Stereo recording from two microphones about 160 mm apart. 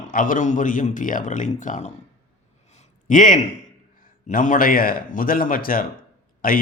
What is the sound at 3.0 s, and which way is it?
A man's voice, 55° left (ahead or behind).